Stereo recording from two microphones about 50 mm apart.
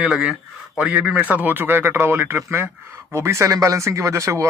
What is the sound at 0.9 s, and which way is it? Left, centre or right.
Speech, right.